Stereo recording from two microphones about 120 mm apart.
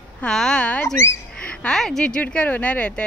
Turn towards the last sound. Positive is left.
turn(degrees=10)  # may be behind; listen again after turning